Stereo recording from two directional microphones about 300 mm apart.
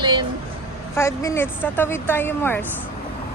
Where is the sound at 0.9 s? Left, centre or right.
Centre.